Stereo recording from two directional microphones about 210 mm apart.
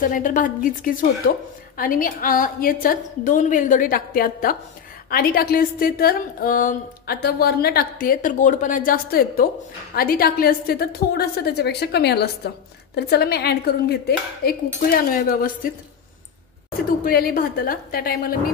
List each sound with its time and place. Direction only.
0.0 s a woman's voice: 40° left (ahead or behind)
17.0 s a woman's voice: 45° left (ahead or behind)